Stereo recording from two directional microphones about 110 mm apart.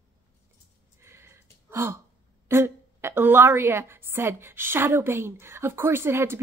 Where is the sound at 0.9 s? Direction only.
25° right (ahead or behind).